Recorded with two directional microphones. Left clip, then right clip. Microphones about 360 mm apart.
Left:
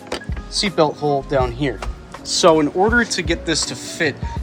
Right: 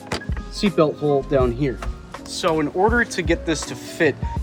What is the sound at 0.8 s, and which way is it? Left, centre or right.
Speech, left.